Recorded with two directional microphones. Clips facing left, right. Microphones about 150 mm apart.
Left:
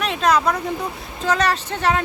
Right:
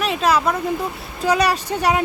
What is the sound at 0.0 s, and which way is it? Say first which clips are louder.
Speech: even; 5° right (ahead or behind).